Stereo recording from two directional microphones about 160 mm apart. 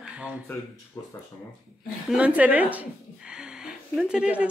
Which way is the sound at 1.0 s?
20° left (ahead or behind).